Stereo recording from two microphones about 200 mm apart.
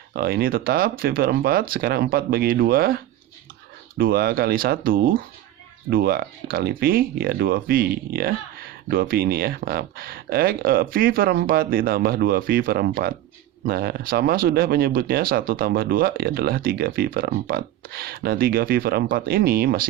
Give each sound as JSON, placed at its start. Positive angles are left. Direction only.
{"t": 0.1, "sound": "speech", "side_deg": -50}